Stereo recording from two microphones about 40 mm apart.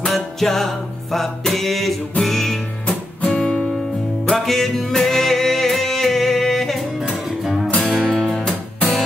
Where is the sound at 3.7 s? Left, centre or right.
Centre.